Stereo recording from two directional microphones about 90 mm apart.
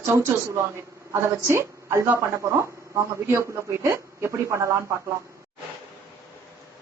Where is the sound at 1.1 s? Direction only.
30° right (ahead or behind).